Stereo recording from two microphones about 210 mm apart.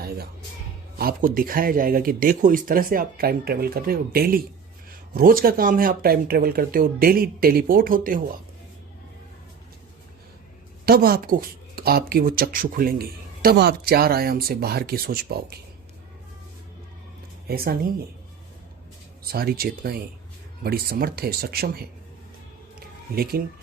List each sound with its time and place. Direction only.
0.9 s speech: 45° right (ahead or behind)
10.8 s speech: 45° right (ahead or behind)
17.5 s speech: 45° right (ahead or behind)
19.2 s speech: 45° right (ahead or behind)
23.1 s speech: 45° right (ahead or behind)